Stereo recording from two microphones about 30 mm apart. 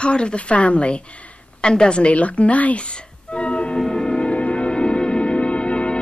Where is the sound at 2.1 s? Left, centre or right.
Left.